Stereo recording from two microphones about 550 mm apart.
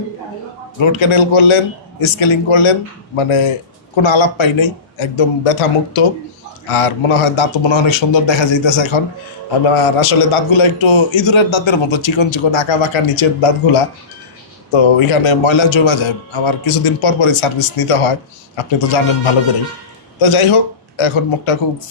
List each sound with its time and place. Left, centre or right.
0.8 s a man's voice: left
14.7 s speech: left